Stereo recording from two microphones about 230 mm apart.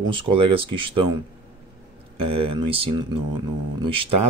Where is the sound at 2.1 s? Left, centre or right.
Right.